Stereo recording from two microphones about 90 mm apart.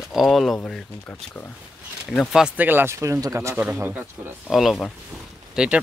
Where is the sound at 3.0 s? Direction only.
35° right (ahead or behind).